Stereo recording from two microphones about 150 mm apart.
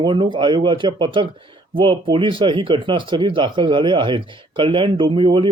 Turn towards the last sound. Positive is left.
turn(degrees=-35)  # may be behind; listen again after turning